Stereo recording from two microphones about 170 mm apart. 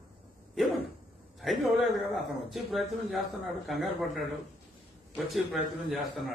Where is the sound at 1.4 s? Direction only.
Centre (ahead or behind).